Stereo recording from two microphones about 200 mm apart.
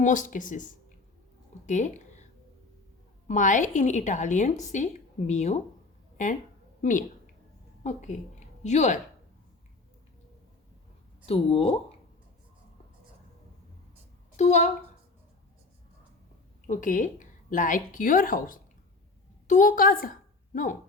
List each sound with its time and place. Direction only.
0.0 s a woman's voice: 40° left (ahead or behind)
1.6 s a sound: 35° left (ahead or behind)
3.2 s a woman's voice: 40° left (ahead or behind)
7.9 s a woman's voice: 35° left (ahead or behind)
11.3 s a woman's voice: 30° left (ahead or behind)
14.3 s a woman's voice: 35° left (ahead or behind)
16.6 s a woman's voice: 40° left (ahead or behind)